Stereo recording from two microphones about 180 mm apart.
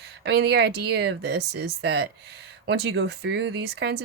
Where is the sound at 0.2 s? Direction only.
65° right (ahead or behind).